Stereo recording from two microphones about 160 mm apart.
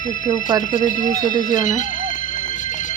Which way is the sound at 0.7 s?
55° left (ahead or behind).